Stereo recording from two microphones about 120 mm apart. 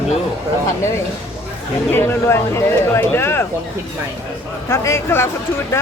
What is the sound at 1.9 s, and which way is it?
Speech, 20° left (ahead or behind).